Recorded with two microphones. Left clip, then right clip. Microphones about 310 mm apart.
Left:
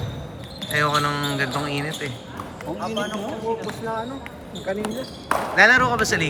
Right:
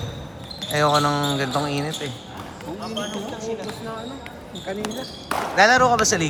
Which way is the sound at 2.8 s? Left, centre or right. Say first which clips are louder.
Left 3 dB; centre.